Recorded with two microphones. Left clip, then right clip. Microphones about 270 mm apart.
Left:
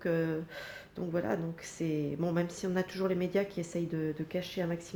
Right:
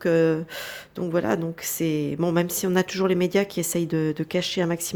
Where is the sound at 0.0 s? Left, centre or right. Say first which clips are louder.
Right 12 dB; right.